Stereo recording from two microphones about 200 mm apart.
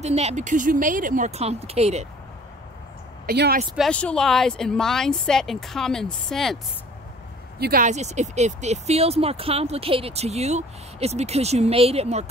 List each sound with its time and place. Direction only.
0.0 s speech: 35° right (ahead or behind)
3.3 s speech: 50° right (ahead or behind)
3.7 s speech: 5° left (ahead or behind)
7.5 s speech: 50° right (ahead or behind)
7.8 s speech: 35° right (ahead or behind)